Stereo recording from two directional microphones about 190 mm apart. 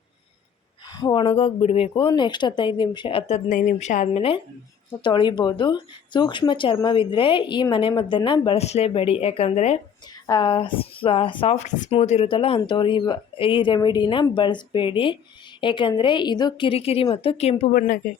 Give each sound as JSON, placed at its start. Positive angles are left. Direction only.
{"t": 0.9, "sound": "speech", "side_deg": 25}
{"t": 10.2, "sound": "speech", "side_deg": 20}
{"t": 17.7, "sound": "speech", "side_deg": 50}